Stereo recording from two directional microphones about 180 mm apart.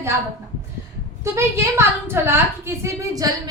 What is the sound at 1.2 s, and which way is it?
A woman's voice, 15° right (ahead or behind).